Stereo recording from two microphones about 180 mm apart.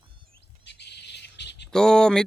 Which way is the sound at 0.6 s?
70° left (ahead or behind).